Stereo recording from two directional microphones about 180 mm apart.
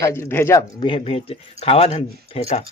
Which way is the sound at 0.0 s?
15° left (ahead or behind).